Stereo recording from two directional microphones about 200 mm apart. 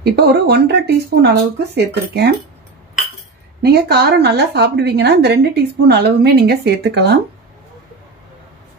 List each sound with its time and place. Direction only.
0.0 s a woman's voice: 55° right (ahead or behind)
3.6 s a woman's voice: 55° right (ahead or behind)